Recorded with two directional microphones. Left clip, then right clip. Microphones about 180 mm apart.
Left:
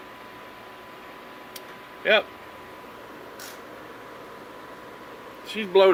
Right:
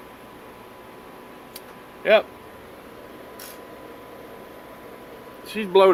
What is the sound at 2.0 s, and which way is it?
Speech, 10° right (ahead or behind).